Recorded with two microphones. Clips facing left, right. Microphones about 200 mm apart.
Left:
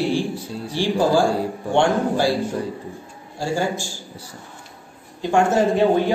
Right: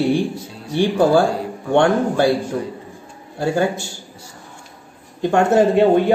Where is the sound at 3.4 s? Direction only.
60° right (ahead or behind).